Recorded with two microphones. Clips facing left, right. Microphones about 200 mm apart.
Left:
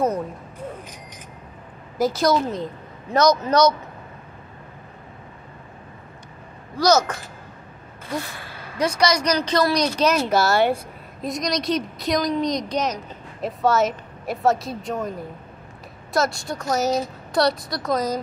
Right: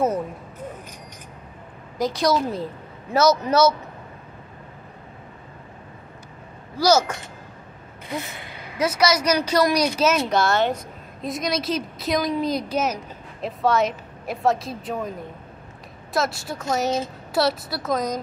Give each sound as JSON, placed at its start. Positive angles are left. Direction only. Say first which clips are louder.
{"t": 2.0, "sound": "a woman's voice", "louder": "left 2 dB", "side_deg": 5}
{"t": 6.8, "sound": "speech", "louder": "even", "side_deg": -10}
{"t": 8.1, "sound": "gasp", "louder": "left 2 dB", "side_deg": -20}
{"t": 8.7, "sound": "a woman's voice", "louder": "even", "side_deg": -5}
{"t": 11.2, "sound": "a woman's voice", "louder": "left 1 dB", "side_deg": -5}